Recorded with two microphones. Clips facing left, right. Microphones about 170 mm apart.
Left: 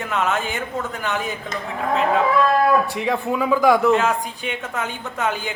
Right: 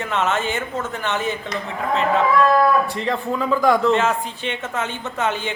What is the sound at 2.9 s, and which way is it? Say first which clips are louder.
A man's voice: left 1 dB; 10° left (ahead or behind).